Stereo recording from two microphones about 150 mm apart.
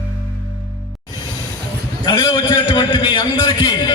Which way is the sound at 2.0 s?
30° left (ahead or behind).